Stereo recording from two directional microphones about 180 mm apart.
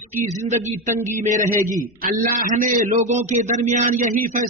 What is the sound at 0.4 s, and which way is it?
A man's voice, 40° right (ahead or behind).